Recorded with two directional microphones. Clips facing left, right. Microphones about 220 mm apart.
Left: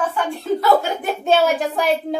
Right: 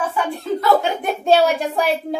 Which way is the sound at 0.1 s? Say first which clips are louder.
Left 1 dB; centre (ahead or behind).